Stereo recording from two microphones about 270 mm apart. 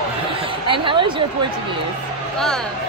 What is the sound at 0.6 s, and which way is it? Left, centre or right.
Speech, centre.